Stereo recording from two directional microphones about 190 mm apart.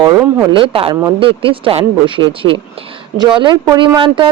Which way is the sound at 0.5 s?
30° right (ahead or behind).